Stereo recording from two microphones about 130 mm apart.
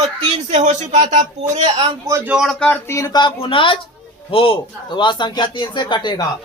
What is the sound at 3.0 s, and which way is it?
A man's voice, 30° left (ahead or behind).